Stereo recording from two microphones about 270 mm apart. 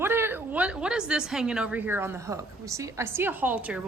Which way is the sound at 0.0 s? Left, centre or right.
Centre.